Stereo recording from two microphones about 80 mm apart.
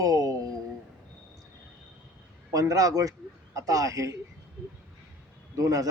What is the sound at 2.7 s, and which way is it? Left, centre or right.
A man's voice, right.